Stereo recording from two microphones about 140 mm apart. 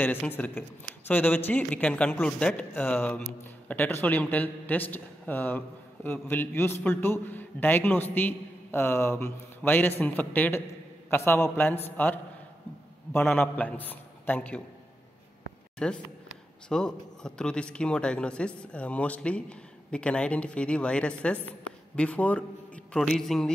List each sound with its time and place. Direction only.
0.0 s speech: 15° left (ahead or behind)
15.8 s a man's voice: 5° left (ahead or behind)